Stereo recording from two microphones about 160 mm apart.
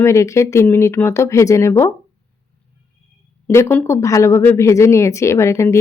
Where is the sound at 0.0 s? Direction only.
20° left (ahead or behind).